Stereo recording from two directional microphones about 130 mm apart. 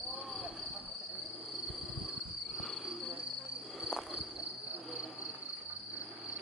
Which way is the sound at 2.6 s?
5° left (ahead or behind).